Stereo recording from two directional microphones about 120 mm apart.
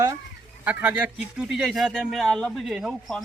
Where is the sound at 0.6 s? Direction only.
10° right (ahead or behind).